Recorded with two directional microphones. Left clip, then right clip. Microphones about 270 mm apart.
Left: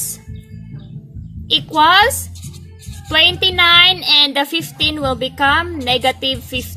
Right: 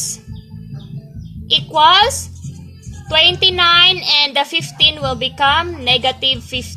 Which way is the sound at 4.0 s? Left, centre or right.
Centre.